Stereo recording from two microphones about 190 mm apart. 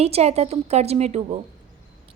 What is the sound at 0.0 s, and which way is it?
A woman's voice, 35° right (ahead or behind).